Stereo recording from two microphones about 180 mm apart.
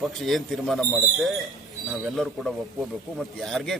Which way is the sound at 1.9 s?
Centre (ahead or behind).